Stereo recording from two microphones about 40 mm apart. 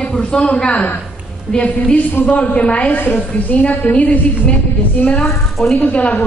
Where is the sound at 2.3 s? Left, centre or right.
Left.